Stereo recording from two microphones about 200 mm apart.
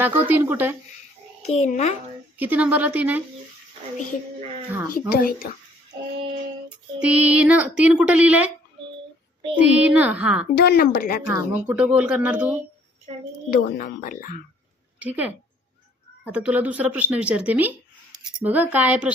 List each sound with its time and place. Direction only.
0.0 s speech: 10° right (ahead or behind)
1.5 s a child's voice: 35° left (ahead or behind)
2.4 s speech: 10° right (ahead or behind)
4.9 s speech: 45° left (ahead or behind)
6.7 s speech: 5° right (ahead or behind)
9.6 s speech: 5° right (ahead or behind)
10.5 s speech: 55° left (ahead or behind)
11.3 s speech: 5° right (ahead or behind)
13.5 s speech: 50° left (ahead or behind)
14.9 s a woman's voice: 5° right (ahead or behind)